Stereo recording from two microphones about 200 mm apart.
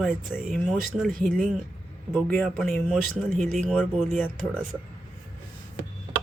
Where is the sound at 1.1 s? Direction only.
40° right (ahead or behind).